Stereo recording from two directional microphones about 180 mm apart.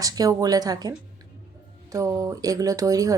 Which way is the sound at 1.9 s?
20° right (ahead or behind).